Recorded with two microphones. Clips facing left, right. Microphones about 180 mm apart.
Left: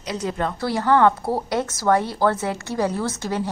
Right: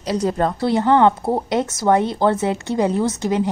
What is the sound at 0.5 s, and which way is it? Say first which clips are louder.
Speech: right 2 dB; 20° right (ahead or behind).